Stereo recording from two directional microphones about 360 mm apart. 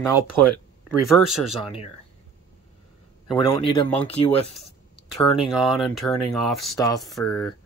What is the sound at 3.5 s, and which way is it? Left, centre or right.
Speech, centre.